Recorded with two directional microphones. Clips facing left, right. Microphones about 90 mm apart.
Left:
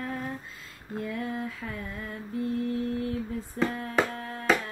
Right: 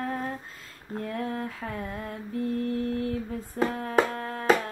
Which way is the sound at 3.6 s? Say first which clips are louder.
Right 3 dB; 45° right (ahead or behind).